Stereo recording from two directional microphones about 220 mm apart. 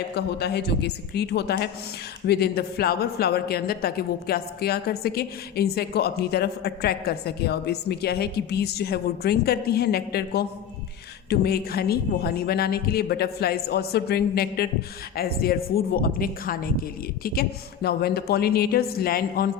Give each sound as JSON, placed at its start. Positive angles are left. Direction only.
{"t": 0.1, "sound": "a woman's voice", "side_deg": 50}